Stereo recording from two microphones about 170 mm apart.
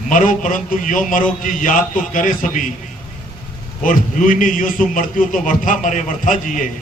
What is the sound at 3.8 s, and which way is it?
A man's voice, 50° left (ahead or behind).